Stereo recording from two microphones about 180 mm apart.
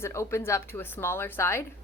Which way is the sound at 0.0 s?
15° left (ahead or behind).